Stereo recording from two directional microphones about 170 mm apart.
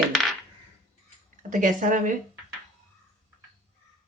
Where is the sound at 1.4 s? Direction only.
50° right (ahead or behind).